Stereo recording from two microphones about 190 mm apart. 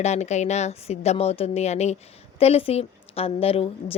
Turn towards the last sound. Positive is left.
turn(degrees=30)  # may be behind; listen again after turning